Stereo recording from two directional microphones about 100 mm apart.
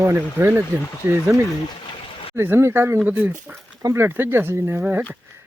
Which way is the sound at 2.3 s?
25° right (ahead or behind).